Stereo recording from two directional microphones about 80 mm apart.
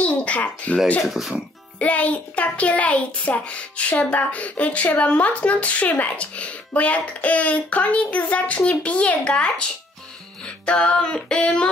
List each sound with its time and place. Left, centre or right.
0.0 s a child's voice: centre
1.0 s speech: centre
1.8 s a child's voice: centre